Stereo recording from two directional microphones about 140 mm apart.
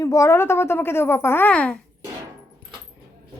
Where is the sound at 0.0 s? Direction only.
25° left (ahead or behind).